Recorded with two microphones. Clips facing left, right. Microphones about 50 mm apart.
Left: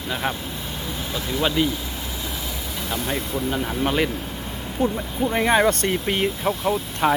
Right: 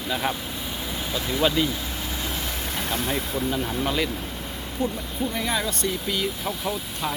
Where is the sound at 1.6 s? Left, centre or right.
Centre.